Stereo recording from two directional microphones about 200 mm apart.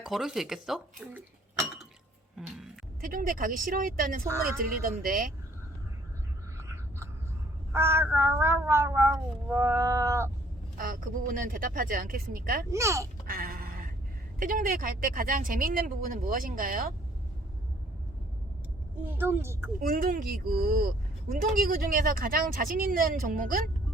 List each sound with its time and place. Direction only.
0.0 s speech: centre (ahead or behind)
2.4 s music: centre (ahead or behind)
3.0 s speech: 45° right (ahead or behind)
6.6 s a sound: 15° right (ahead or behind)
10.8 s speech: 45° right (ahead or behind)
12.7 s a sound: 15° right (ahead or behind)
13.2 s music: 45° right (ahead or behind)
14.3 s speech: 45° right (ahead or behind)
19.0 s a sound: 10° right (ahead or behind)
19.8 s speech: 45° right (ahead or behind)